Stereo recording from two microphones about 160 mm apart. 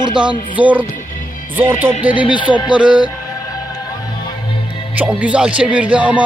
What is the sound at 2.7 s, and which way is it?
Speech, 5° right (ahead or behind).